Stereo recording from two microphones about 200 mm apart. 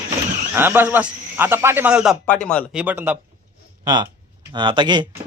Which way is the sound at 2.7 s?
10° right (ahead or behind).